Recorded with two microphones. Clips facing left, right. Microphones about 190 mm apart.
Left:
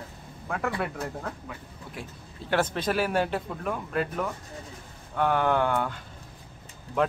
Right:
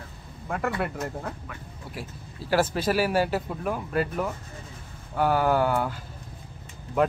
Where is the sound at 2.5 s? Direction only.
5° right (ahead or behind).